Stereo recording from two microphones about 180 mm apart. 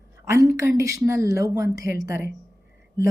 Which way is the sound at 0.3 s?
15° right (ahead or behind).